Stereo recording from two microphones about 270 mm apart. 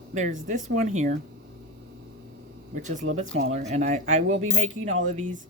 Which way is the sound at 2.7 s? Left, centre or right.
Right.